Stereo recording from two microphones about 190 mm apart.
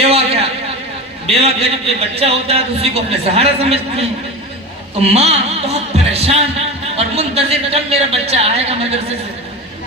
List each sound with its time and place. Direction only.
0.0 s a sound: 30° right (ahead or behind)
1.3 s a man's voice: 30° right (ahead or behind)
5.0 s a man's voice: 35° right (ahead or behind)